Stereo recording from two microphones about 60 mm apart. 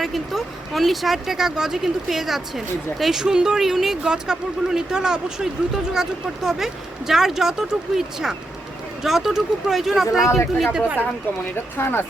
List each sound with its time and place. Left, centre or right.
0.0 s speech: centre
10.2 s speech: left
11.8 s speech: left